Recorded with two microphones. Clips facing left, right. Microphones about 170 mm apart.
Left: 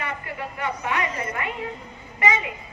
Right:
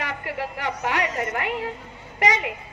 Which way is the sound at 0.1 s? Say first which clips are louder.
Right 3 dB; 80° right.